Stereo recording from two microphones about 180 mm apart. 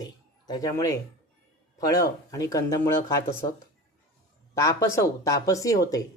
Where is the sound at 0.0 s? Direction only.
20° left (ahead or behind).